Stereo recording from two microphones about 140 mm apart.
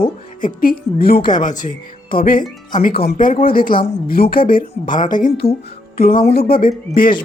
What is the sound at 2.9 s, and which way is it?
Speech, 45° left (ahead or behind).